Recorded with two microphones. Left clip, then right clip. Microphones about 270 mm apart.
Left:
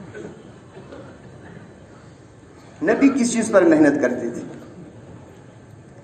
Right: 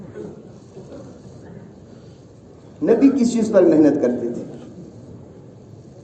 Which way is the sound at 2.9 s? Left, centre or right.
Left.